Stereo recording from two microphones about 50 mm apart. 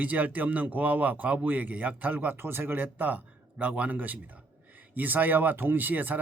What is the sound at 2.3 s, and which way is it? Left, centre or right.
A man's voice, right.